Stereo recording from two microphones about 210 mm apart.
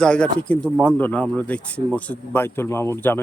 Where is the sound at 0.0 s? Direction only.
5° left (ahead or behind).